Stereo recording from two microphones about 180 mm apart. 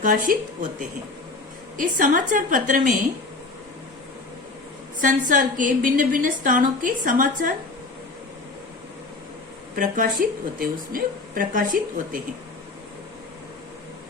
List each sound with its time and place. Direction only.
0.0 s a woman's voice: 50° right (ahead or behind)
4.9 s a woman's voice: 45° right (ahead or behind)
9.7 s a woman's voice: 50° right (ahead or behind)